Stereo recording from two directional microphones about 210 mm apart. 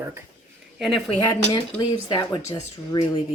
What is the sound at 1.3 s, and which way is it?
Speech, 20° left (ahead or behind).